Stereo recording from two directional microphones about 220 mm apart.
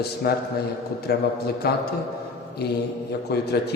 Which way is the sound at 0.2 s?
45° left (ahead or behind).